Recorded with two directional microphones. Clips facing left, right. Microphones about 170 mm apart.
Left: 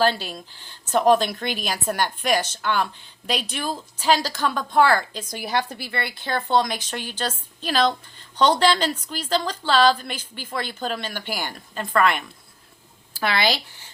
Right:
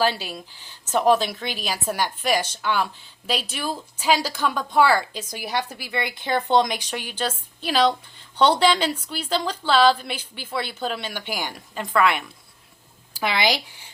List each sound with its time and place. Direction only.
0.0 s speech: 10° right (ahead or behind)